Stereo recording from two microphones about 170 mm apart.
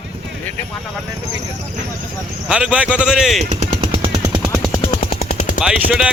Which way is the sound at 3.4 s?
30° right (ahead or behind).